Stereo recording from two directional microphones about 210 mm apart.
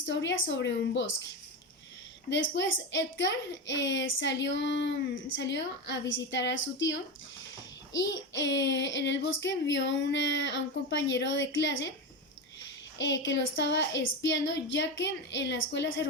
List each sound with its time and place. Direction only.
0.0 s a woman's voice: 60° left (ahead or behind)
2.3 s a woman's voice: 60° left (ahead or behind)